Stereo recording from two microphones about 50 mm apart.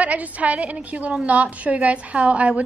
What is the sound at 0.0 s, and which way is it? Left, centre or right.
A woman's voice, right.